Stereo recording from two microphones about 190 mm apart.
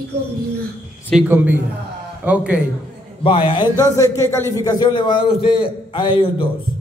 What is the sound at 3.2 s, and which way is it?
A man's voice, 30° left (ahead or behind).